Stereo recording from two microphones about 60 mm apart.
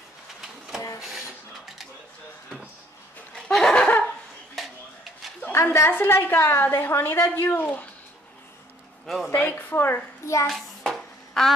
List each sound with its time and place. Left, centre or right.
0.4 s a sound: centre
3.3 s snicker: centre
4.6 s a sound: centre
5.4 s a woman's voice: left
6.6 s a woman's voice: left
9.3 s a woman's voice: left
10.4 s hands: centre